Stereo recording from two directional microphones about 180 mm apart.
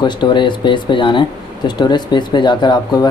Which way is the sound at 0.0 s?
25° left (ahead or behind).